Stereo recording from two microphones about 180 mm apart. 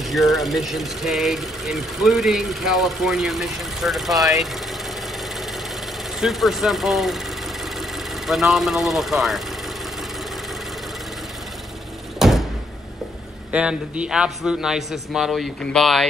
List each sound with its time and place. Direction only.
0.0 s speech: centre (ahead or behind)
4.2 s speech: 20° right (ahead or behind)
6.2 s speech: centre (ahead or behind)
8.3 s speech: centre (ahead or behind)
12.2 s door: centre (ahead or behind)
13.5 s speech: 5° right (ahead or behind)